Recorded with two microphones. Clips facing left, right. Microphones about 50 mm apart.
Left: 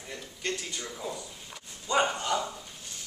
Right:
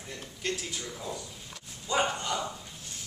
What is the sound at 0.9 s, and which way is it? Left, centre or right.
Bow-wow, centre.